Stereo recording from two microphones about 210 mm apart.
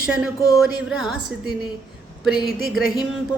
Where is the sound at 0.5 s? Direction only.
Centre (ahead or behind).